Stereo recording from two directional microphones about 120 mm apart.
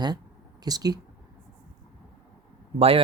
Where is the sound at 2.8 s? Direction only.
55° right (ahead or behind).